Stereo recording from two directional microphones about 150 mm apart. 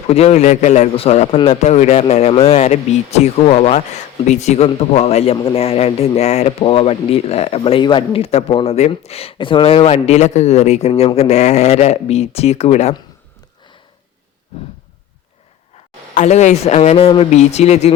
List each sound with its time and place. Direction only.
0.1 s a man's voice: 45° left (ahead or behind)
16.1 s a man's voice: 50° left (ahead or behind)